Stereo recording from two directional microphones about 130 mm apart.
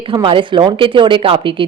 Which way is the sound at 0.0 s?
40° right (ahead or behind).